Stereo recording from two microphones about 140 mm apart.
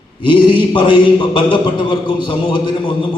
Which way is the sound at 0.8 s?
35° left (ahead or behind).